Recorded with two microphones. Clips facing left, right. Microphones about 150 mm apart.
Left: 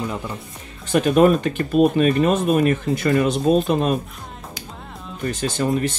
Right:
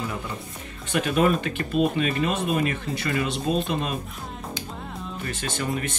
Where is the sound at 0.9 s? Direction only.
40° left (ahead or behind).